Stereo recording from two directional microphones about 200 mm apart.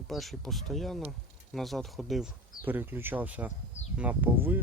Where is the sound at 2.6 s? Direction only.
10° right (ahead or behind).